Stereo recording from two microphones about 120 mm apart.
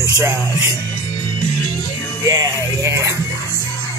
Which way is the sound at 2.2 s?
30° right (ahead or behind).